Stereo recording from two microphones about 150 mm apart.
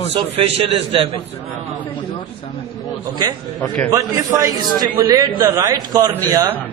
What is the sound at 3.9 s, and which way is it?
A man's voice, 20° right (ahead or behind).